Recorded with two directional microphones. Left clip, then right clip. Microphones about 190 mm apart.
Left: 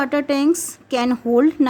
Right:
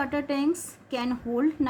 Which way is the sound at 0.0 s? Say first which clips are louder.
Left 8 dB; 60° left (ahead or behind).